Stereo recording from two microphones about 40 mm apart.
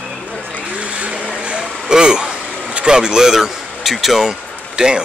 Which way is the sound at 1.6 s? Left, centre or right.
Centre.